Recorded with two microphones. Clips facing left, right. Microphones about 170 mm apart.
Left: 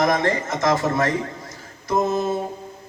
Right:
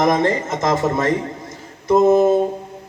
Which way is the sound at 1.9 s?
20° right (ahead or behind).